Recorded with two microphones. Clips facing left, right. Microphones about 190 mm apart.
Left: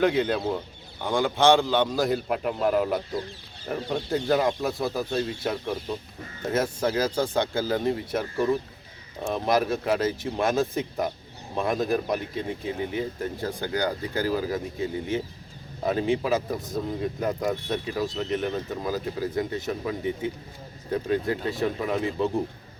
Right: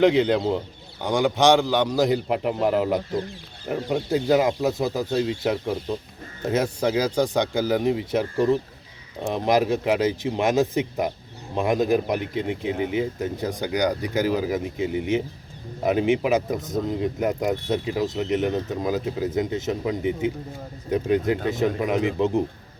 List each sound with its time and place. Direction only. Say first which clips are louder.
0.0 s a man's voice: right 5 dB; 20° right (ahead or behind)